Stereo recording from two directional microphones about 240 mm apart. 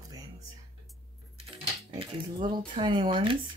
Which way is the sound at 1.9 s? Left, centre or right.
Centre.